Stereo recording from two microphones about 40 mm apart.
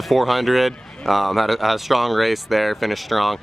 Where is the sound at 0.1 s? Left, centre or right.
Centre.